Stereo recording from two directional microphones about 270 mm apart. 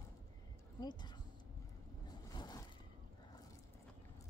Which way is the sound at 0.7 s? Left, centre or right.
Centre.